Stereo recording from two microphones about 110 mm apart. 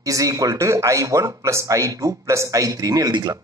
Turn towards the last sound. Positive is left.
turn(degrees=-35)  # may be behind; listen again after turning